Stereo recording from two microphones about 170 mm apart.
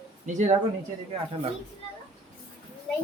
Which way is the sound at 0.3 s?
45° right (ahead or behind).